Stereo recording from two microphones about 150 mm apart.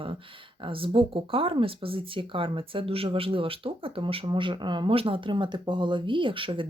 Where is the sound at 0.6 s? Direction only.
35° right (ahead or behind).